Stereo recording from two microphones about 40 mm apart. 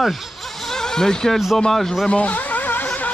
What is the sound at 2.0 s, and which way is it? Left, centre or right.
Speech, left.